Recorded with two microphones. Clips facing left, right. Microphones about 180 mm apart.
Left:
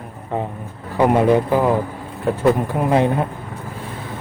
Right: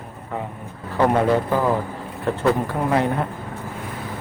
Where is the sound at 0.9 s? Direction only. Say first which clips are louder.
Left 3 dB; 15° left (ahead or behind).